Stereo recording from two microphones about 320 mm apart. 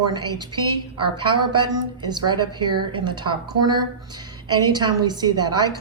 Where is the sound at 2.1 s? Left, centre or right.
Centre.